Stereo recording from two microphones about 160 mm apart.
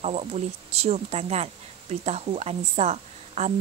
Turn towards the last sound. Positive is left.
turn(degrees=-45)  # may be behind; listen again after turning